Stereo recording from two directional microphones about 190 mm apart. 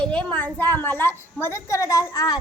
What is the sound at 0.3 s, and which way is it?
A woman's voice, 10° left (ahead or behind).